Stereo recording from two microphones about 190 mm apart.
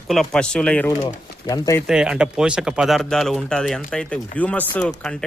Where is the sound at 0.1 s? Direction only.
5° left (ahead or behind).